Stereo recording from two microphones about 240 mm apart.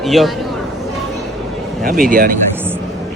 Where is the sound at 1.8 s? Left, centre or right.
Right.